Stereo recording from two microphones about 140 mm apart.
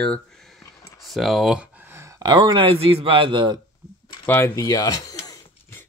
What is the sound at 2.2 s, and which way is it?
A man's voice, 35° right (ahead or behind).